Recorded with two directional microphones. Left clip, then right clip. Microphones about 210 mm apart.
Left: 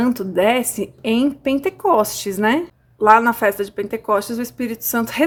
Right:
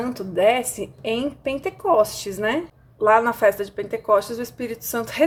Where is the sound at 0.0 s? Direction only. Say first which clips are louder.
Left 2 dB; 40° left (ahead or behind).